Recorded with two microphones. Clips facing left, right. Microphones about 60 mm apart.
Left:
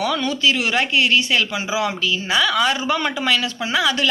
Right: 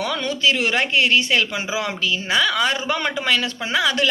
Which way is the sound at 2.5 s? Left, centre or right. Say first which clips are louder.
Left 2 dB; right.